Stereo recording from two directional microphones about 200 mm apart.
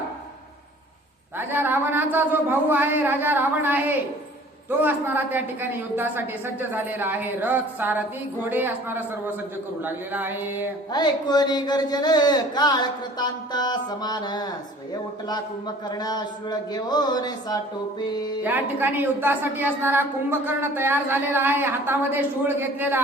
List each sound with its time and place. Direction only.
1.4 s a woman's voice: 10° right (ahead or behind)
10.9 s speech: 20° left (ahead or behind)
18.4 s a woman's voice: 10° right (ahead or behind)